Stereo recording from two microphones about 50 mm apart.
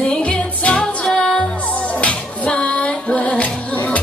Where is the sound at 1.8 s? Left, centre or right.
Left.